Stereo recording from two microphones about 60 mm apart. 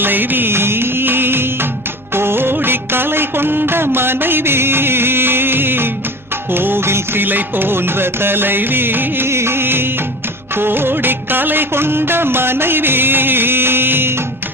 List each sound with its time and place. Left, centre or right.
0.0 s music: right